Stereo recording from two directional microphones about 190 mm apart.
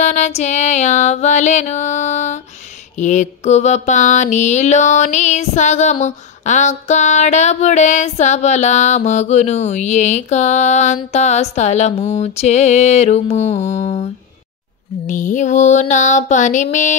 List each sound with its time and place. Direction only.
0.0 s female singing: 35° left (ahead or behind)
3.0 s mantra: 40° left (ahead or behind)